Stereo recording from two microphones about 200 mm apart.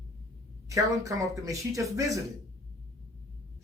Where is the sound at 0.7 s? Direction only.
15° right (ahead or behind).